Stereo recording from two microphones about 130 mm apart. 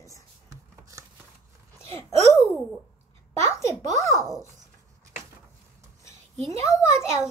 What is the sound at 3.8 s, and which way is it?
Speech, 55° right (ahead or behind).